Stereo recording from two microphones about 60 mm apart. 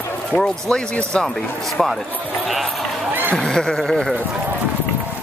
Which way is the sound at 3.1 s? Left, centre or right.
Right.